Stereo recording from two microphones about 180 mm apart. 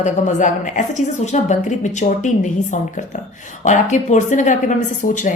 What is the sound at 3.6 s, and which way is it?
A woman's voice, 40° left (ahead or behind).